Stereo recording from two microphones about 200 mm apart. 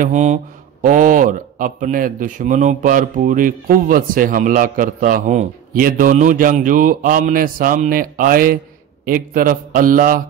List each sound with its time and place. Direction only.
0.0 s a man's voice: 35° right (ahead or behind)